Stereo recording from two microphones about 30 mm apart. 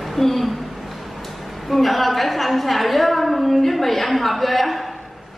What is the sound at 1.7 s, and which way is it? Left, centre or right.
A woman's voice, centre.